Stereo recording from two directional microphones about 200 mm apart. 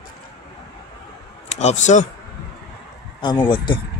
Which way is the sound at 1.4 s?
35° left (ahead or behind).